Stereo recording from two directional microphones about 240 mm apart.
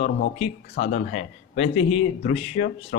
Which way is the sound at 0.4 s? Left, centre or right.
Left.